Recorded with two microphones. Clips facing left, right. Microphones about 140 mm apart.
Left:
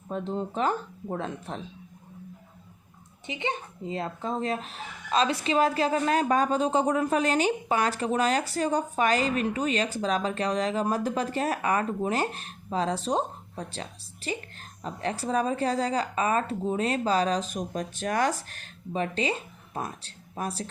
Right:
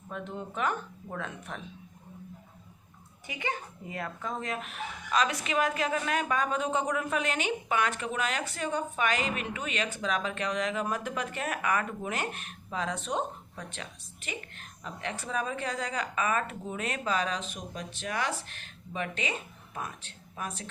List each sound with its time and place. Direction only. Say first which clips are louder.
0.1 s speech: left 7 dB; 35° left (ahead or behind)
3.2 s speech: left 3 dB; 25° left (ahead or behind)